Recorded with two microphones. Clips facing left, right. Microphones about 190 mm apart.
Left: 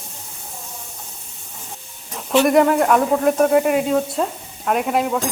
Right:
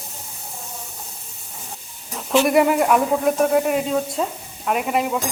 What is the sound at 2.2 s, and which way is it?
Speech, centre (ahead or behind).